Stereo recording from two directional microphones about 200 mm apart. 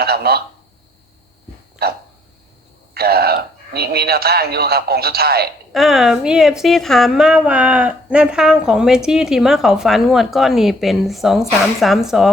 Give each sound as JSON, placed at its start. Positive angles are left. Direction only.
{"t": 0.0, "sound": "a sound", "side_deg": -50}
{"t": 1.8, "sound": "a man's voice", "side_deg": -50}
{"t": 5.7, "sound": "a woman's voice", "side_deg": 0}